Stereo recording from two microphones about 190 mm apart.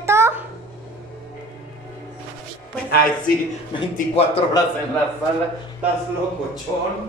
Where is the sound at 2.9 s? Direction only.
50° left (ahead or behind).